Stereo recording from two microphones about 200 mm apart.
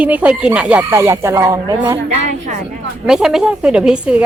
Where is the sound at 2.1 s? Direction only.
35° right (ahead or behind).